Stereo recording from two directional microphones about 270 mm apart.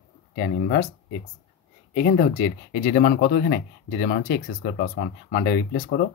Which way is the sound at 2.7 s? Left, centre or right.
Left.